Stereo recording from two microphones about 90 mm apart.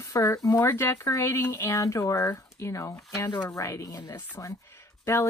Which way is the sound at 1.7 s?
40° left (ahead or behind).